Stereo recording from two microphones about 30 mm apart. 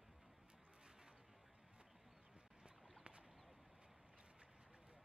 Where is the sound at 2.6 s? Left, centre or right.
Right.